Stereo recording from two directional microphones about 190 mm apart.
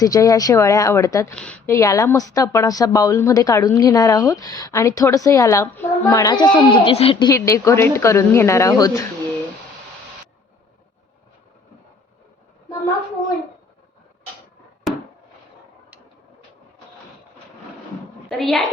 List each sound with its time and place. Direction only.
0.0 s speech: 20° left (ahead or behind)
18.3 s a woman's voice: centre (ahead or behind)